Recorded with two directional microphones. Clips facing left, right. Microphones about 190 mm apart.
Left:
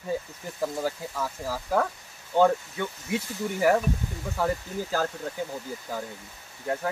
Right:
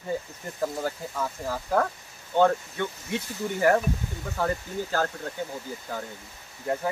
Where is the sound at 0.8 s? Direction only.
Centre (ahead or behind).